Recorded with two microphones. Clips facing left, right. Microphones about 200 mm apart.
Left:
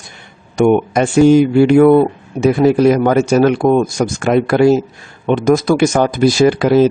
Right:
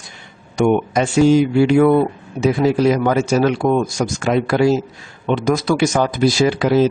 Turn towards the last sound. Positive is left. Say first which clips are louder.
# left 4 dB
turn(degrees=55)  # may be behind; listen again after turning